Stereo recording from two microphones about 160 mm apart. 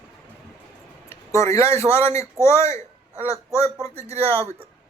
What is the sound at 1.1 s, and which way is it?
Speech, 15° left (ahead or behind).